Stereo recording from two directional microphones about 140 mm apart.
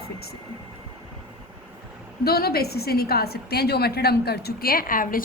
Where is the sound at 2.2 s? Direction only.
90° left.